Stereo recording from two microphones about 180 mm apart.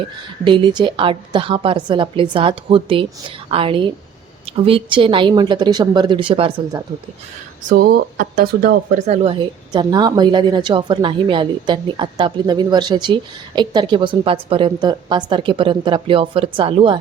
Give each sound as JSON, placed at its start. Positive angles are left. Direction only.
{"t": 0.4, "sound": "speech", "side_deg": -25}
{"t": 7.7, "sound": "speech", "side_deg": -55}